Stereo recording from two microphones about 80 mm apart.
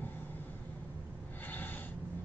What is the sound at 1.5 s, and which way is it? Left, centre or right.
Snort, left.